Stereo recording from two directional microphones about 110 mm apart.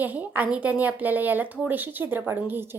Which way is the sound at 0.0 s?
15° right (ahead or behind).